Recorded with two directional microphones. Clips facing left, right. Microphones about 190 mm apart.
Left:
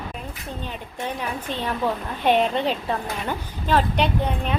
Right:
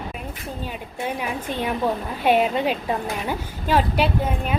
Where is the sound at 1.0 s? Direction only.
10° right (ahead or behind).